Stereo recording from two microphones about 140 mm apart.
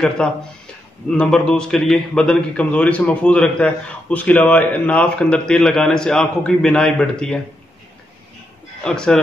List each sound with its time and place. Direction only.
0.2 s a man's voice: 5° left (ahead or behind)
8.8 s speech: 5° left (ahead or behind)